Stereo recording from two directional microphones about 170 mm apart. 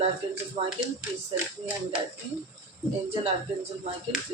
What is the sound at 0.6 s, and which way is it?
Speech, 35° right (ahead or behind).